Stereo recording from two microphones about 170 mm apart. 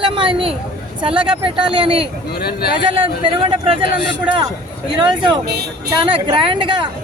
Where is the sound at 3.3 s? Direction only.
30° right (ahead or behind).